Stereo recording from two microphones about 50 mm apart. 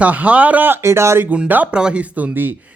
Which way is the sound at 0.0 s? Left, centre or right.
Right.